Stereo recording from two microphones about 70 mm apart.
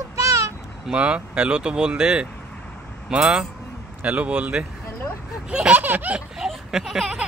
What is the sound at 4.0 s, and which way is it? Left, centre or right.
Speech, right.